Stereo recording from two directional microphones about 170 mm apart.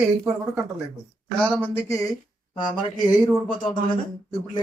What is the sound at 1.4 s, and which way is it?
Speech, 10° left (ahead or behind).